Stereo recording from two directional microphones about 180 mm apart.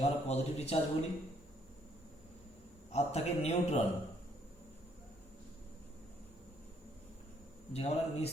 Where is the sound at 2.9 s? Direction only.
35° left (ahead or behind).